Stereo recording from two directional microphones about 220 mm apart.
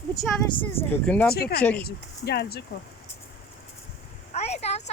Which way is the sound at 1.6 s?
5° left (ahead or behind).